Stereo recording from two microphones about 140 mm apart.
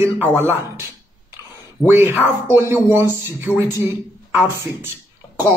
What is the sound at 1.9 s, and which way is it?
Speech, 15° right (ahead or behind).